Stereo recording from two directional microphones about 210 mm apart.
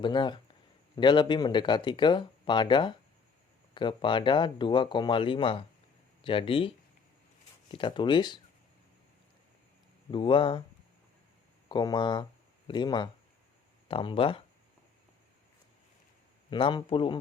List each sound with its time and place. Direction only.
0.0 s speech: 20° left (ahead or behind)
10.1 s speech: 25° left (ahead or behind)
11.7 s speech: 20° left (ahead or behind)
16.5 s speech: 20° left (ahead or behind)